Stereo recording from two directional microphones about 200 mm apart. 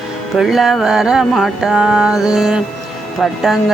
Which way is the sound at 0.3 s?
Centre (ahead or behind).